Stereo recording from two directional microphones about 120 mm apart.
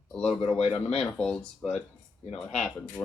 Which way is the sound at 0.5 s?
60° left (ahead or behind).